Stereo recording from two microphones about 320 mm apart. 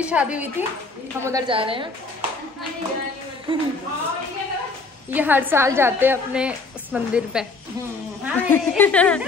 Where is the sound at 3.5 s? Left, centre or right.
Centre.